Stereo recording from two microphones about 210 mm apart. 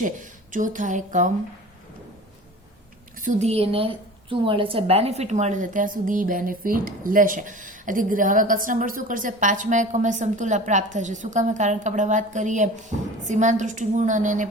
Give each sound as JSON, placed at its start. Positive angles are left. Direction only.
{"t": 0.0, "sound": "a woman's voice", "side_deg": -40}
{"t": 3.2, "sound": "a woman's voice", "side_deg": -35}